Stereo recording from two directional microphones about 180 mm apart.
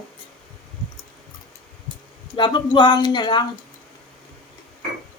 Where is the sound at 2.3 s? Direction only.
25° left (ahead or behind).